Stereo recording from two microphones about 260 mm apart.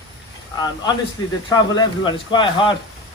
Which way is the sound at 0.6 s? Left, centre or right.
Centre.